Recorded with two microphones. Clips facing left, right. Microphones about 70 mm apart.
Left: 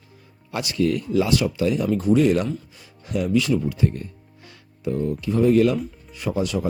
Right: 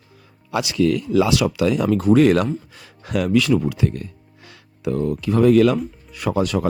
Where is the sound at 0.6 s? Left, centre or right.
Right.